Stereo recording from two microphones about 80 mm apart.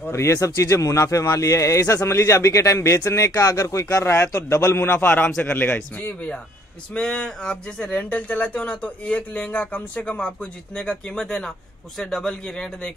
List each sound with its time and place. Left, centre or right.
0.1 s speech: left
4.9 s a man's voice: left